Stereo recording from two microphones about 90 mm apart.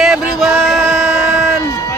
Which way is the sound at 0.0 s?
5° right (ahead or behind).